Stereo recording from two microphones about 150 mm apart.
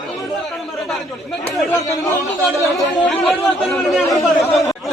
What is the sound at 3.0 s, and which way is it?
Chatter, centre (ahead or behind).